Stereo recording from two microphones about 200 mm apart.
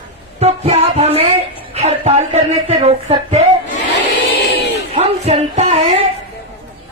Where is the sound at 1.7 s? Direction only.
35° right (ahead or behind).